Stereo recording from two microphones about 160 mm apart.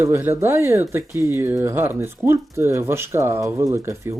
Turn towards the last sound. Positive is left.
turn(degrees=-15)  # may be behind; listen again after turning